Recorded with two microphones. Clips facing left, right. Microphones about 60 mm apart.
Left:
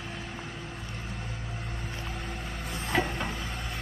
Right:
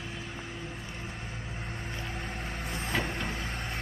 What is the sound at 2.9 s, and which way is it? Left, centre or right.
Vehicle, centre.